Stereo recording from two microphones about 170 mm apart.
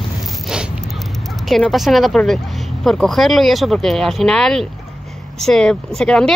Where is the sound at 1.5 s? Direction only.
Centre (ahead or behind).